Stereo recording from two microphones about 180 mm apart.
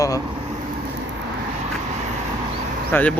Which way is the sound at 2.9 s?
10° left (ahead or behind).